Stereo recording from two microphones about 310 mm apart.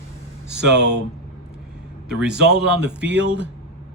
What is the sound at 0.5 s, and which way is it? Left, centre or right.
Speech, right.